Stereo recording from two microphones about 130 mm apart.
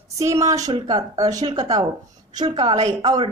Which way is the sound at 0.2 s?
25° right (ahead or behind).